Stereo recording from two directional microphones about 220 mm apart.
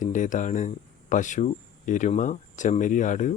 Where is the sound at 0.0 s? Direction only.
35° left (ahead or behind).